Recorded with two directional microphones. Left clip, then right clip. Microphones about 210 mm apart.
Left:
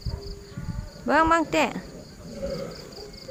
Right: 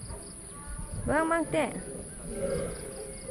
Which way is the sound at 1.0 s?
25° left (ahead or behind).